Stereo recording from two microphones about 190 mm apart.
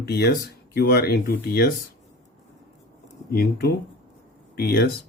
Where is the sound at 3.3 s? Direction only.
55° left (ahead or behind).